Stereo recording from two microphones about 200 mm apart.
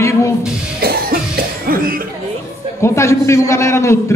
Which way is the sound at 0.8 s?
50° right (ahead or behind).